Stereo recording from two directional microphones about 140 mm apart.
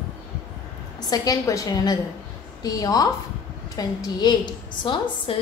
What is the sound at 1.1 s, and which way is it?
A woman's voice, 25° left (ahead or behind).